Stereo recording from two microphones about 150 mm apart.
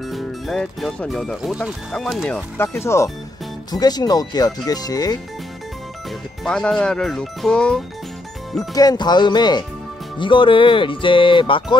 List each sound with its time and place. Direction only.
0.0 s speech: centre (ahead or behind)
2.2 s speech: 10° left (ahead or behind)
6.4 s speech: 5° left (ahead or behind)
8.5 s speech: 25° left (ahead or behind)